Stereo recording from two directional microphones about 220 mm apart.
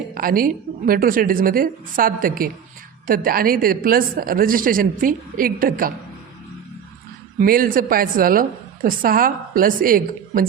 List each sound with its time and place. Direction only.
0.1 s a woman's voice: 40° right (ahead or behind)
7.3 s a woman's voice: 40° right (ahead or behind)